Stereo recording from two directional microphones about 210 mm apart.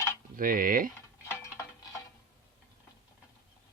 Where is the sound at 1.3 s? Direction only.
15° left (ahead or behind).